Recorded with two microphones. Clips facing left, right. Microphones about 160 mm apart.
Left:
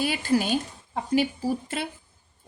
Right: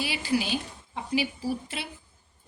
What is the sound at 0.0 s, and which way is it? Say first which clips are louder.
A woman's voice: left 4 dB; 50° left (ahead or behind).